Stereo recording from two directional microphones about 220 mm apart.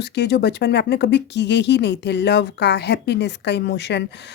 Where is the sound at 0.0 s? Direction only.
50° left (ahead or behind).